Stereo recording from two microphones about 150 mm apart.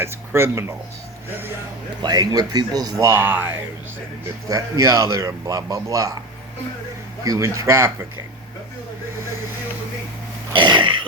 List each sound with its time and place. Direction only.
0.0 s speech: 15° right (ahead or behind)
2.0 s a man's voice: 25° right (ahead or behind)
4.4 s a man's voice: 20° right (ahead or behind)
7.3 s a man's voice: 20° right (ahead or behind)
10.5 s throat clearing: 30° right (ahead or behind)